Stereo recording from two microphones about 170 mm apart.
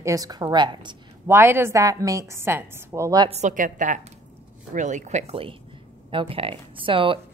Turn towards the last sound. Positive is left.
turn(degrees=-30)  # may be behind; listen again after turning